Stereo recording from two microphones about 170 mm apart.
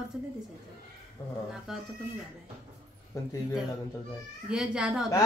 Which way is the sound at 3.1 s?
20° left (ahead or behind).